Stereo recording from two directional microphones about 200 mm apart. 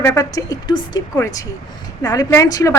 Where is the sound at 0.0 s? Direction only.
15° left (ahead or behind).